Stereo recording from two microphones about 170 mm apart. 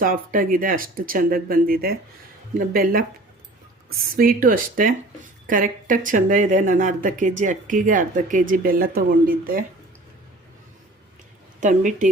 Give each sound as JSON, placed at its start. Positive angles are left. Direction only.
{"t": 0.0, "sound": "speech", "side_deg": -55}
{"t": 4.1, "sound": "speech", "side_deg": -55}
{"t": 11.6, "sound": "speech", "side_deg": -50}